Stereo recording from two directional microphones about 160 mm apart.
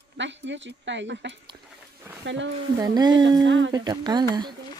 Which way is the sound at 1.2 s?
90° right.